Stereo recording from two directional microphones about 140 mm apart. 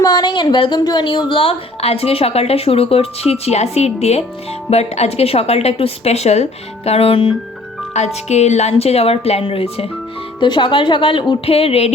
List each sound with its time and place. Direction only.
0.0 s a woman's voice: 30° left (ahead or behind)
7.9 s a woman's voice: 55° left (ahead or behind)